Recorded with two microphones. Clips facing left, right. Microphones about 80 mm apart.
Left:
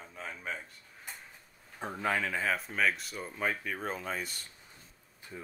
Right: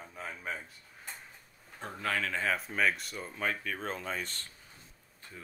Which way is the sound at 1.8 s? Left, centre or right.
Centre.